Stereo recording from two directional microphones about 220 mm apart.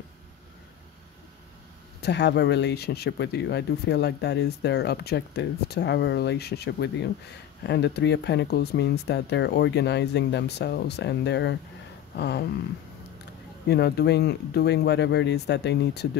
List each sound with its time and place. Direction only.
2.0 s speech: 50° left (ahead or behind)
13.7 s speech: 50° left (ahead or behind)